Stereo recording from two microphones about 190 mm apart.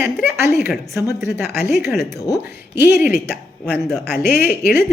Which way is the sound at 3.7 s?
Centre (ahead or behind).